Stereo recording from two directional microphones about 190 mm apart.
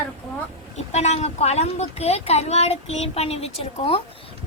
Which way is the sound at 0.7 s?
35° left (ahead or behind).